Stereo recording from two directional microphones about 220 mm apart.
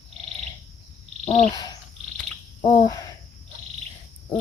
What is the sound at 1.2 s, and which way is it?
Cricket, 30° left (ahead or behind).